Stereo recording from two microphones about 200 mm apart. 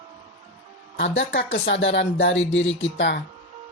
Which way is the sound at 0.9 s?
70° left (ahead or behind).